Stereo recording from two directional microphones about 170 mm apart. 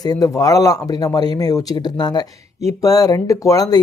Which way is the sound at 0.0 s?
20° left (ahead or behind).